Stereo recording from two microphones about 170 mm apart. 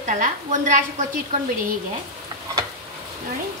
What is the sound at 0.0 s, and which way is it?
Speech, 45° right (ahead or behind).